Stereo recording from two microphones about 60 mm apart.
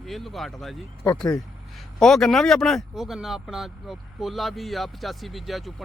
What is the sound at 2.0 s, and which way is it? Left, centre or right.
Speech, centre.